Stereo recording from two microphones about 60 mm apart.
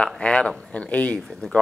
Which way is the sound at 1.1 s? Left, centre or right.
Centre.